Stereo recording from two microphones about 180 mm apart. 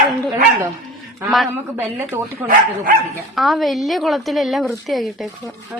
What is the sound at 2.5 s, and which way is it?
Speech, 50° right (ahead or behind).